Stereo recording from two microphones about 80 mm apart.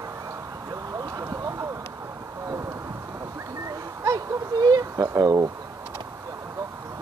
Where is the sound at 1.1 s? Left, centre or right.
Right.